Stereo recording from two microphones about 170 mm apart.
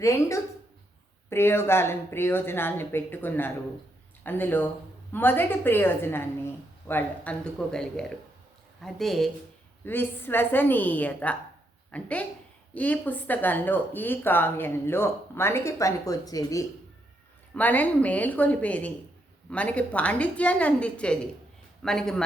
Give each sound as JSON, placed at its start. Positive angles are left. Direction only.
{"t": 0.0, "sound": "speech", "side_deg": 15}
{"t": 9.8, "sound": "speech", "side_deg": 10}
{"t": 17.5, "sound": "speech", "side_deg": 10}